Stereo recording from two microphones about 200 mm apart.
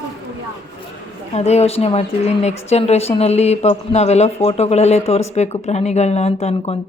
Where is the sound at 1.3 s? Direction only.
30° left (ahead or behind).